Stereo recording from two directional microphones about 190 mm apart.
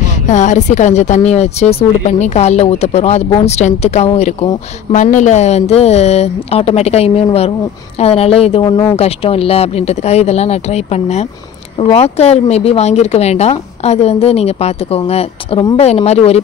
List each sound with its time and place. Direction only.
0.0 s speech: 40° left (ahead or behind)